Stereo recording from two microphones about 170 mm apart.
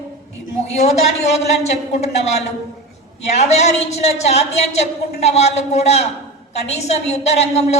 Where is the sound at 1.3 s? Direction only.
40° left (ahead or behind).